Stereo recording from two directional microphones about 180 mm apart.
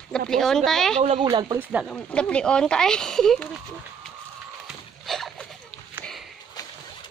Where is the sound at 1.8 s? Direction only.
5° left (ahead or behind).